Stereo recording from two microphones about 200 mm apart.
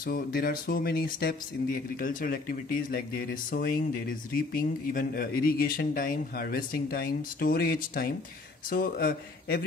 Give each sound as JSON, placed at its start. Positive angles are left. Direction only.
{"t": 0.0, "sound": "speech", "side_deg": 50}